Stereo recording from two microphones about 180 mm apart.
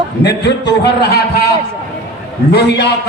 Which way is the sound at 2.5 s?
65° left (ahead or behind).